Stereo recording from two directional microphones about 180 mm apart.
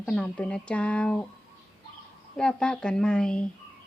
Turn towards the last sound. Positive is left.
turn(degrees=5)  # may be behind; listen again after turning